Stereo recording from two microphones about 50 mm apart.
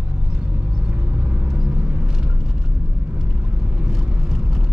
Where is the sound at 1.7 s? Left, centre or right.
Right.